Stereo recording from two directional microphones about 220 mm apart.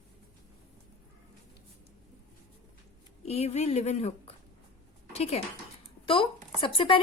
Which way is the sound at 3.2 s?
30° left (ahead or behind).